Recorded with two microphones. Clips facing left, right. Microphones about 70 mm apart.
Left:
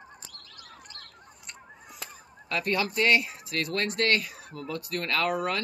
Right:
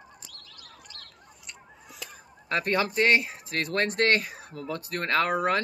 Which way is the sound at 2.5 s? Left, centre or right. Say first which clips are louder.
Right 2 dB; right.